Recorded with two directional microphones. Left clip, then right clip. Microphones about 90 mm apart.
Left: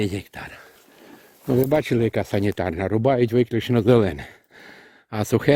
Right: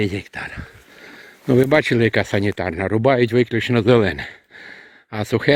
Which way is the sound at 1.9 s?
5° right (ahead or behind).